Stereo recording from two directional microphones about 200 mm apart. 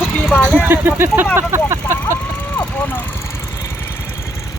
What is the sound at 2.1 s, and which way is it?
Vehicle, 10° left (ahead or behind).